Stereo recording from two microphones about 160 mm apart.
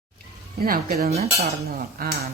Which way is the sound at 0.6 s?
65° right (ahead or behind).